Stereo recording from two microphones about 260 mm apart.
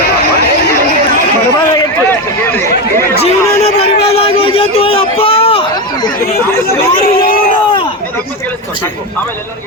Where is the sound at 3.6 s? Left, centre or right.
Left.